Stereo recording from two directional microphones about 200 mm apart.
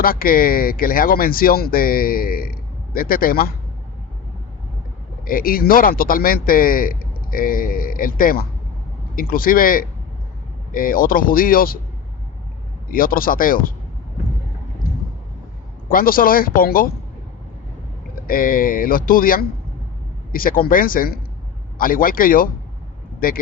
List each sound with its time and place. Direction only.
0.0 s speech: 45° left (ahead or behind)
5.2 s speech: 45° left (ahead or behind)
12.9 s speech: 45° left (ahead or behind)
15.9 s speech: 45° left (ahead or behind)
18.1 s speech: 45° left (ahead or behind)